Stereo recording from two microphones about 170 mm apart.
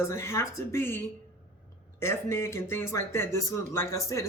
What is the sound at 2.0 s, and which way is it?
Speech, 15° left (ahead or behind).